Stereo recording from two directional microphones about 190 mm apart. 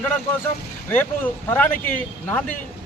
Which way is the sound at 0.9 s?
10° left (ahead or behind).